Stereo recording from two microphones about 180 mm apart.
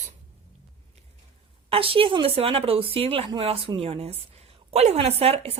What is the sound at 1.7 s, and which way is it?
Speech, 30° right (ahead or behind).